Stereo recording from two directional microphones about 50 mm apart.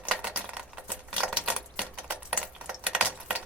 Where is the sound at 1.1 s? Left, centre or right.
Right.